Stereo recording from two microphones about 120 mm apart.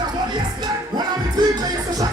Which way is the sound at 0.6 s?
35° right (ahead or behind).